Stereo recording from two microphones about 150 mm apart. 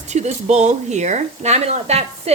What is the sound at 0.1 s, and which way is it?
Speech, 50° right (ahead or behind).